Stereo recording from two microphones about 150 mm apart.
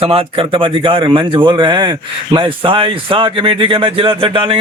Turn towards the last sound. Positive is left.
turn(degrees=-35)  # may be behind; listen again after turning